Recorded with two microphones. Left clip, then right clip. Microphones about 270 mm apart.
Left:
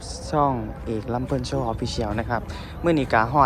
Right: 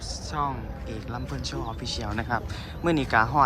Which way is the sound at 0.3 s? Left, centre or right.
Centre.